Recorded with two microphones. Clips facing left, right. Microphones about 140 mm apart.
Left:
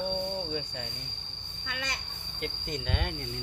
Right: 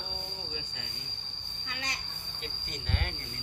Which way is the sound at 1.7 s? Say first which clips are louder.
Left 3 dB; 65° left (ahead or behind).